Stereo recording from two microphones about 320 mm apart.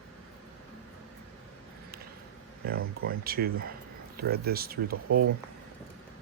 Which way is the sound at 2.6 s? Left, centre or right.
Right.